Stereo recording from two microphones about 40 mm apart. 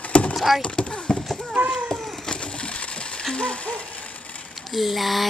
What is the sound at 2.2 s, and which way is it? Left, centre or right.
Sewing machine, left.